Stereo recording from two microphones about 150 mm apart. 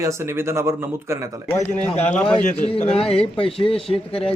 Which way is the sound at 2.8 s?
40° left (ahead or behind).